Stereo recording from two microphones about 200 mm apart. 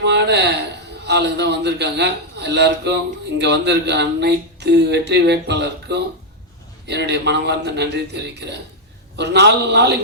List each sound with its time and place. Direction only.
0.0 s a man's voice: 60° right (ahead or behind)